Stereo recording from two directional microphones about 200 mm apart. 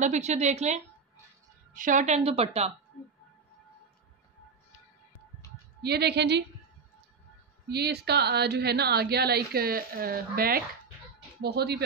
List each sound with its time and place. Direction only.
0.0 s a woman's voice: 35° right (ahead or behind)
5.8 s speech: 55° right (ahead or behind)
7.6 s speech: 55° right (ahead or behind)